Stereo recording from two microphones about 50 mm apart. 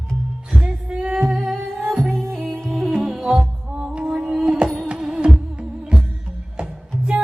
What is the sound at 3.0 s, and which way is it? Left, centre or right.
Music, centre.